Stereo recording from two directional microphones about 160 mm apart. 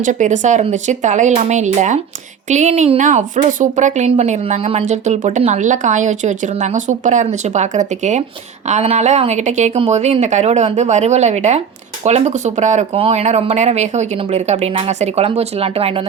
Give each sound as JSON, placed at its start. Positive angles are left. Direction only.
{"t": 0.0, "sound": "a woman's voice", "side_deg": -50}